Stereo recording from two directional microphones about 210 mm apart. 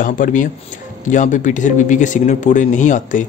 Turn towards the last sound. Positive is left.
turn(degrees=35)  # may be behind; listen again after turning